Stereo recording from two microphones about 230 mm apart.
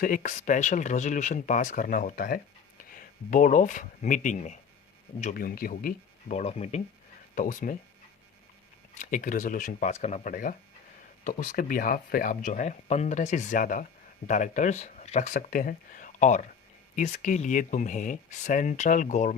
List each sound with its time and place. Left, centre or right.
0.0 s speech: left
9.0 s speech: left